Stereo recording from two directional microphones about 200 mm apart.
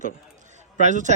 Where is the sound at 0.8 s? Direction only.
35° right (ahead or behind).